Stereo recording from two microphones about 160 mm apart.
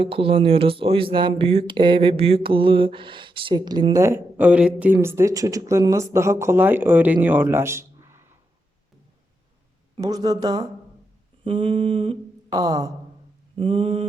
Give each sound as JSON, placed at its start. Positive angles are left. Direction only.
{"t": 0.0, "sound": "speech", "side_deg": -35}
{"t": 10.0, "sound": "speech", "side_deg": -20}
{"t": 11.4, "sound": "speech", "side_deg": -35}
{"t": 13.6, "sound": "speech", "side_deg": -35}